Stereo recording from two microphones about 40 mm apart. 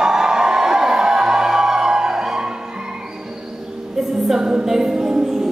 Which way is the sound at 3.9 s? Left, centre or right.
Centre.